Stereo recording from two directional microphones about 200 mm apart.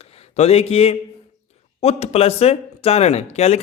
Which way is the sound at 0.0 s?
30° left (ahead or behind).